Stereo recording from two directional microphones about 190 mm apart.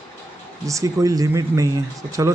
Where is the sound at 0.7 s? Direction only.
15° right (ahead or behind).